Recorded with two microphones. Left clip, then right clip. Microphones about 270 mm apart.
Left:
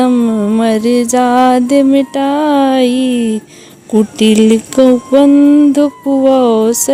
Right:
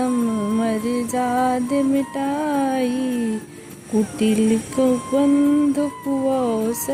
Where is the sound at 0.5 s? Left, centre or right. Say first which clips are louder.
Left 13 dB; left.